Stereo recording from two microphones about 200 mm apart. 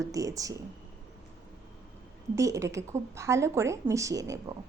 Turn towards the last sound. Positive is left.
turn(degrees=-15)  # may be behind; listen again after turning